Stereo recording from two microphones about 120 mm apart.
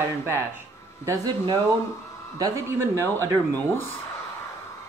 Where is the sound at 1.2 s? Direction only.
35° right (ahead or behind).